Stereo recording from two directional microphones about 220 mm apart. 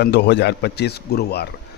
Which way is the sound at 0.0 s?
50° left (ahead or behind).